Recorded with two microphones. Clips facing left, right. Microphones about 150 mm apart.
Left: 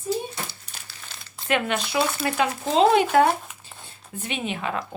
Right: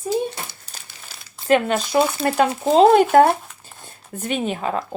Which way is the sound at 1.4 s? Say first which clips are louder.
Right 7 dB; 35° right (ahead or behind).